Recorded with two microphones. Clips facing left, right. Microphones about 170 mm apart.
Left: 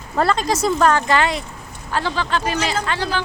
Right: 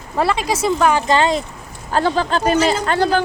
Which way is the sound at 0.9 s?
20° right (ahead or behind).